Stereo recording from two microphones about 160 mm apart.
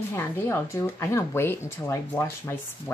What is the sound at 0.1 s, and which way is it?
Speech, 15° left (ahead or behind).